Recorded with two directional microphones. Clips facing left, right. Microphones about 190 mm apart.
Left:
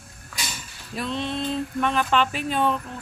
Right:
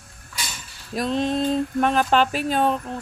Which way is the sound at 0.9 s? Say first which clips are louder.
Right 6 dB; 40° right (ahead or behind).